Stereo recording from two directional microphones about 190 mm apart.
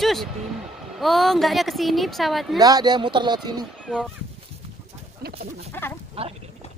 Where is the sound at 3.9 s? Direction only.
5° left (ahead or behind).